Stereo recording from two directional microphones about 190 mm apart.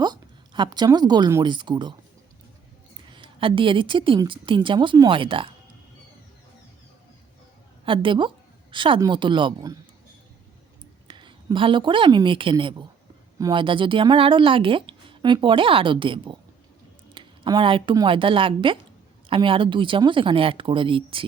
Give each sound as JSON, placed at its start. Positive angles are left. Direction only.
{"t": 0.0, "sound": "speech", "side_deg": -25}
{"t": 3.1, "sound": "speech", "side_deg": -25}
{"t": 7.9, "sound": "speech", "side_deg": -25}
{"t": 11.1, "sound": "a woman's voice", "side_deg": -25}